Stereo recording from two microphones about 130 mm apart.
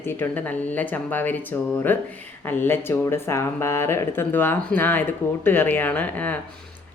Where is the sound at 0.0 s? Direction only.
15° left (ahead or behind).